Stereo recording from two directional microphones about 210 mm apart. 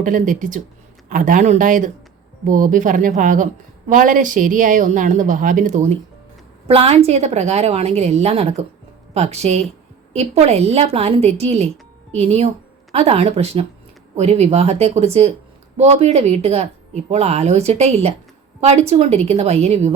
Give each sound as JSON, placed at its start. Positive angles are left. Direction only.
{"t": 0.0, "sound": "a woman's voice", "side_deg": -40}